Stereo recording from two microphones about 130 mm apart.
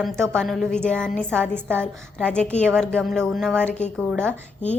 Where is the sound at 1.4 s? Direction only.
15° right (ahead or behind).